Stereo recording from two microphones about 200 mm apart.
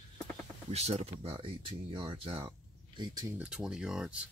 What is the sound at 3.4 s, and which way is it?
Speech, 5° right (ahead or behind).